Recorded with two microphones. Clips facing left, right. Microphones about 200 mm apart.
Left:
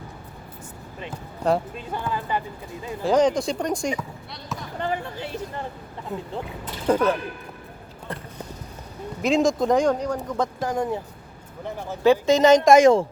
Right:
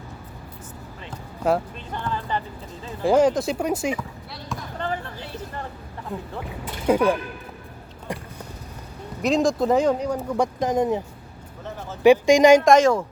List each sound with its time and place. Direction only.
1.5 s speech: 5° left (ahead or behind)
3.0 s speech: 10° right (ahead or behind)
4.8 s speech: 15° left (ahead or behind)
6.1 s speech: centre (ahead or behind)
6.8 s speech: 10° right (ahead or behind)
9.2 s speech: centre (ahead or behind); by 11.0 s 20° right (ahead or behind)
11.6 s speech: 15° left (ahead or behind)
12.0 s speech: 15° right (ahead or behind)
12.8 s speech: 25° left (ahead or behind)